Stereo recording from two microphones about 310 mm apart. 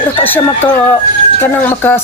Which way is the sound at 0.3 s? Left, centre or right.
Centre.